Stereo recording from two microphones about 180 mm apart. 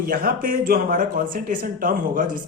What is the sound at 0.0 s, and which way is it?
Speech, 55° right (ahead or behind).